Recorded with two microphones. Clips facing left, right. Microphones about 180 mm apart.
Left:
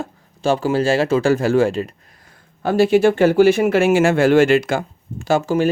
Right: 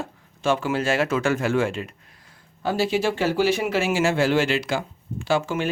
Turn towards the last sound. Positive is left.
turn(degrees=40)  # may be behind; listen again after turning